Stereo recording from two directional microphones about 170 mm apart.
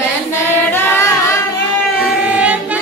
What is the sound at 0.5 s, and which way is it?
Singing, 15° left (ahead or behind).